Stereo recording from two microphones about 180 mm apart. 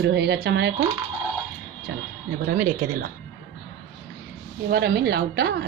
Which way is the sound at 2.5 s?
55° right (ahead or behind).